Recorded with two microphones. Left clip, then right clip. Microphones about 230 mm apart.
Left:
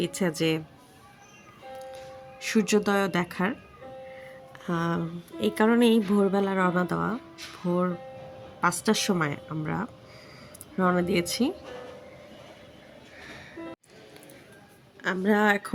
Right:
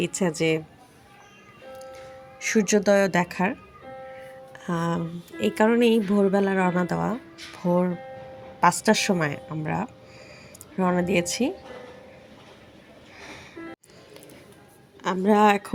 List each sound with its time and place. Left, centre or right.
0.0 s speech: centre
2.4 s speech: centre
4.5 s a woman's voice: centre
13.1 s music: centre
15.0 s speech: centre